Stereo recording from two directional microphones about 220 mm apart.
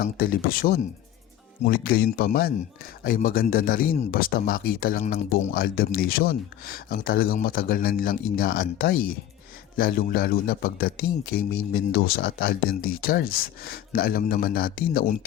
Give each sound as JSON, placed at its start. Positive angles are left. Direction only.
{"t": 0.0, "sound": "speech", "side_deg": 40}